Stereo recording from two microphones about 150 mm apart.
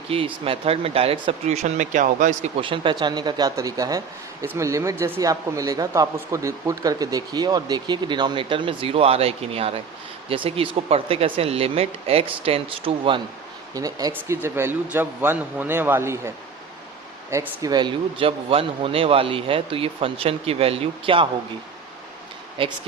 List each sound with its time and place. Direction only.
0.1 s speech: 40° right (ahead or behind); by 2.5 s 55° right (ahead or behind)
2.6 s speech: 35° right (ahead or behind)
13.7 s speech: 25° right (ahead or behind)
17.3 s speech: 20° right (ahead or behind); by 21.2 s 40° right (ahead or behind)
22.6 s speech: 35° right (ahead or behind)